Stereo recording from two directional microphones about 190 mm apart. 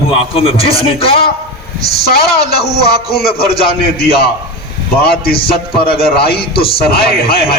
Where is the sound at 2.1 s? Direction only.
55° left (ahead or behind).